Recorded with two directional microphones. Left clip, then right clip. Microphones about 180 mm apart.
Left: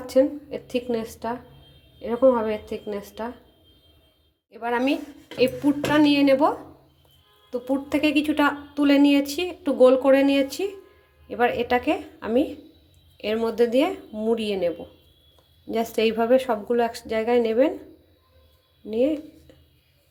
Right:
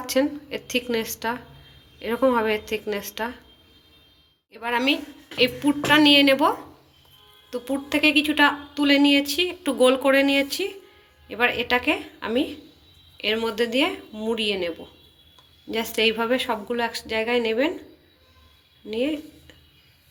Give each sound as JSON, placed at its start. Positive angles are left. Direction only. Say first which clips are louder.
{"t": 0.0, "sound": "a woman's voice", "louder": "left 3 dB", "side_deg": 25}
{"t": 4.5, "sound": "a woman's voice", "louder": "right 1 dB", "side_deg": 40}
{"t": 15.7, "sound": "a woman's voice", "louder": "even", "side_deg": 40}
{"t": 18.9, "sound": "a woman's voice", "louder": "left 3 dB", "side_deg": 40}